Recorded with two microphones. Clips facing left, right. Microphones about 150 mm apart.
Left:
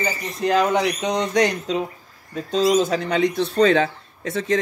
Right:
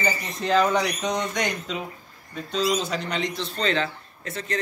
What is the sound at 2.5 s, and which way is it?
Speech, 45° left (ahead or behind).